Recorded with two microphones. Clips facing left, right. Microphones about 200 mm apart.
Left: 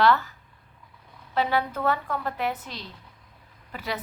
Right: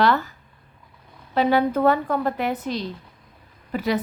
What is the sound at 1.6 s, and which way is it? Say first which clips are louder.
Speech: right 8 dB; 40° right (ahead or behind).